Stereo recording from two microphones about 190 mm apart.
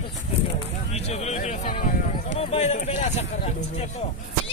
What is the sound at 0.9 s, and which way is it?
Speech, 35° left (ahead or behind).